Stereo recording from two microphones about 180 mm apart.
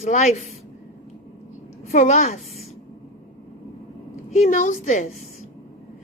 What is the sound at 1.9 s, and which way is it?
Speech, 40° left (ahead or behind).